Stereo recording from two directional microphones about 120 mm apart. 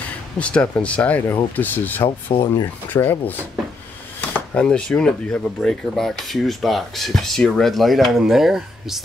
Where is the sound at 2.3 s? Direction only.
55° left (ahead or behind).